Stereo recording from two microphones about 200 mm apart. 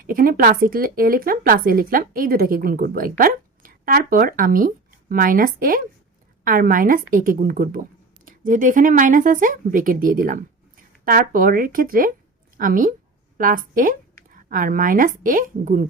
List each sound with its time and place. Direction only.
0.0 s a woman's voice: 45° right (ahead or behind)